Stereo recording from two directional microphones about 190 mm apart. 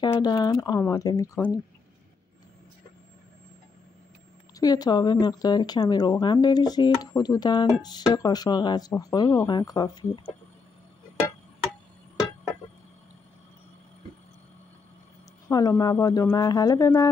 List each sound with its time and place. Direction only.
0.0 s speech: 20° left (ahead or behind)
4.6 s speech: 20° left (ahead or behind)
15.4 s speech: 15° left (ahead or behind)